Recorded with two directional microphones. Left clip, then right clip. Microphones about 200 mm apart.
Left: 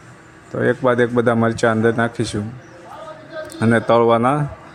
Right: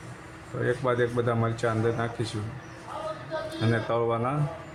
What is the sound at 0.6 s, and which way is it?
Speech, 40° left (ahead or behind).